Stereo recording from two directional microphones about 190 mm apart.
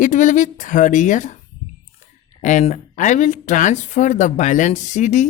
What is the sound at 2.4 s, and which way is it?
Speech, 40° left (ahead or behind).